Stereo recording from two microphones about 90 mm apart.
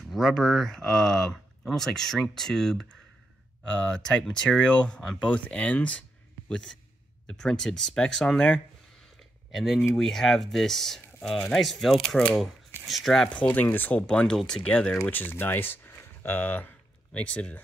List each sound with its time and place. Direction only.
0.0 s speech: centre (ahead or behind)
7.2 s speech: 10° left (ahead or behind)
13.4 s speech: 15° left (ahead or behind)
15.0 s speech: 20° left (ahead or behind)